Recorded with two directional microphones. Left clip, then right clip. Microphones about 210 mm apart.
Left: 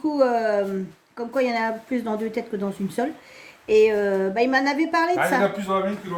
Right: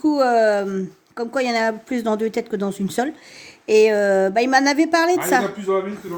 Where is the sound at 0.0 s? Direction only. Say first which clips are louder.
Right 5 dB; 50° right (ahead or behind).